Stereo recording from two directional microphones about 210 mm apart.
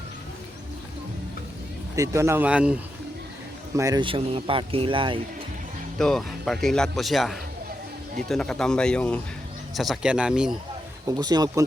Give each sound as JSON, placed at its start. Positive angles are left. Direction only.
{"t": 2.0, "sound": "speech", "side_deg": -15}
{"t": 3.8, "sound": "speech", "side_deg": -15}
{"t": 6.0, "sound": "speech", "side_deg": 0}
{"t": 11.0, "sound": "speech", "side_deg": -20}